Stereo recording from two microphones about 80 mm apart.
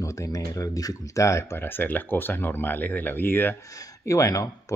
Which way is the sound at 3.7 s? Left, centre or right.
Left.